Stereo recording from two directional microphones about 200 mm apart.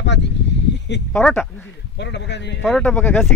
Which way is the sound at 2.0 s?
60° left (ahead or behind).